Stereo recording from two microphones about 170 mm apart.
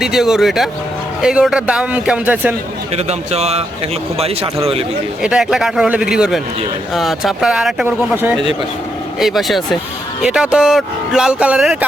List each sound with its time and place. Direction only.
0.0 s speech: centre (ahead or behind)
2.9 s a man's voice: 40° right (ahead or behind)
5.2 s speech: 5° right (ahead or behind)
9.2 s speech: centre (ahead or behind)